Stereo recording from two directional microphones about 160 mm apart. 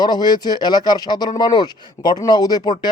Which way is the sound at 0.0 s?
25° left (ahead or behind).